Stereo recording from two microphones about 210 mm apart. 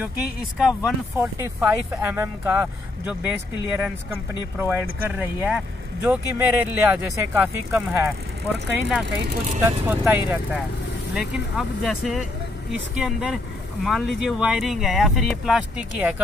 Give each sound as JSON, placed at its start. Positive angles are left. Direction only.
{"t": 0.6, "sound": "speech", "side_deg": 0}
{"t": 9.0, "sound": "speech", "side_deg": -50}
{"t": 9.7, "sound": "speech", "side_deg": -10}